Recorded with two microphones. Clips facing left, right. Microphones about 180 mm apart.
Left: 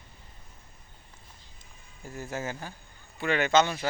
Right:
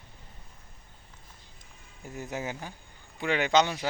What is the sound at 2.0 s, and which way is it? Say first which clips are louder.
Speech: even; 20° right (ahead or behind).